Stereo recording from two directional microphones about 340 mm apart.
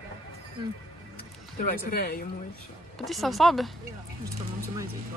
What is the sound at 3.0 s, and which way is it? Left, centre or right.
Speech, centre.